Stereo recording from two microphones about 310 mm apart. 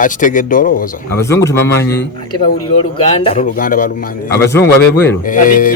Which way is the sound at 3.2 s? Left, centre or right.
Left.